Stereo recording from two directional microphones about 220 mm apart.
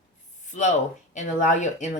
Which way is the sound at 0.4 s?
35° left (ahead or behind).